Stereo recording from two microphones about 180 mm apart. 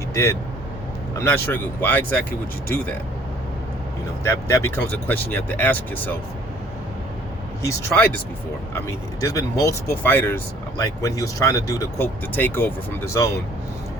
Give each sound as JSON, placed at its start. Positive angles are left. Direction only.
{"t": 0.1, "sound": "speech", "side_deg": 15}
{"t": 4.2, "sound": "speech", "side_deg": 15}
{"t": 7.6, "sound": "speech", "side_deg": 15}